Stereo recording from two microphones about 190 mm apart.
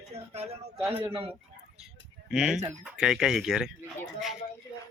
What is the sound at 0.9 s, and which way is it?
Speech, 30° right (ahead or behind).